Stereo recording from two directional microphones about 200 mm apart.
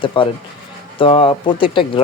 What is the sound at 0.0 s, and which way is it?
Speech, 25° left (ahead or behind).